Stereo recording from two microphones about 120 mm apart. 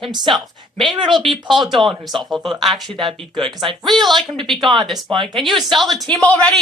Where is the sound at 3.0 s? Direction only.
45° right (ahead or behind).